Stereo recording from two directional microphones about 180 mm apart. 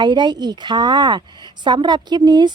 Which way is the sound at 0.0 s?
25° right (ahead or behind).